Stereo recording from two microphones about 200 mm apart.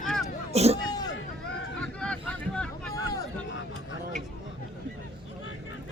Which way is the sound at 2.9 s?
15° left (ahead or behind).